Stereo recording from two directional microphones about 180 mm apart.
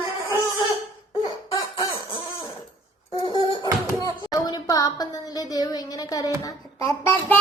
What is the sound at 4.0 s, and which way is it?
A woman's voice, 20° left (ahead or behind).